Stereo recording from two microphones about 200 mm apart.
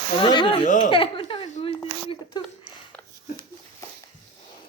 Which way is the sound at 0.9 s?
25° left (ahead or behind).